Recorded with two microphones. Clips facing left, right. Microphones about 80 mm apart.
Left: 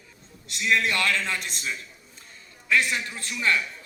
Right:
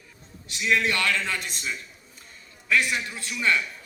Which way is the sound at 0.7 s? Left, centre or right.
Centre.